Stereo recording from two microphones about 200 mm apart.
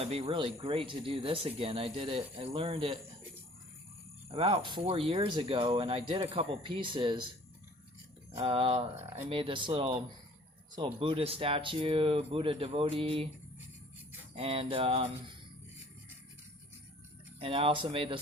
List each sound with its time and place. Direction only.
0.0 s speech: 30° right (ahead or behind)
4.3 s speech: 25° right (ahead or behind)
8.4 s speech: 25° right (ahead or behind)
14.3 s speech: 30° right (ahead or behind)
17.4 s speech: 25° right (ahead or behind)